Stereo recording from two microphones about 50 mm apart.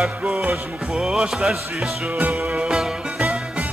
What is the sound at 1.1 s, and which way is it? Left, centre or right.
Music, centre.